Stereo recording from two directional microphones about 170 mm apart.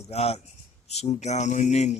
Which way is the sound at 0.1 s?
40° left (ahead or behind).